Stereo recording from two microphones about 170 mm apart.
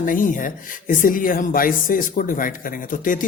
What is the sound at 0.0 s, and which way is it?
Speech, 55° left (ahead or behind).